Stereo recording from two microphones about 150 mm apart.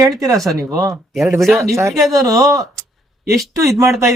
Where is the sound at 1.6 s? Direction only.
20° right (ahead or behind).